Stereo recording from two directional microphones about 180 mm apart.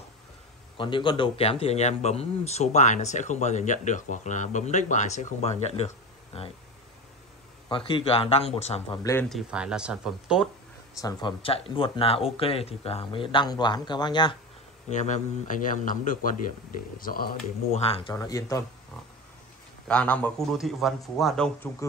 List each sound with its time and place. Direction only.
0.7 s a man's voice: 25° left (ahead or behind)
7.7 s a man's voice: 30° left (ahead or behind)
9.0 s speech: 15° left (ahead or behind)
9.3 s a man's voice: 5° right (ahead or behind)
11.0 s speech: 20° left (ahead or behind)
14.9 s a man's voice: 40° left (ahead or behind)
17.8 s a man's voice: 30° left (ahead or behind)
18.1 s speech: 20° left (ahead or behind)
19.9 s a man's voice: 5° left (ahead or behind)